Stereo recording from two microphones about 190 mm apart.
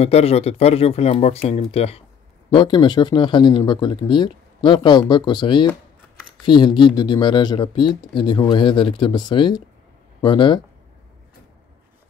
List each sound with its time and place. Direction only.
0.0 s speech: 35° left (ahead or behind)